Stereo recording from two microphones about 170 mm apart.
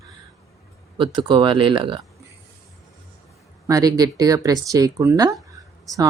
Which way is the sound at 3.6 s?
20° right (ahead or behind).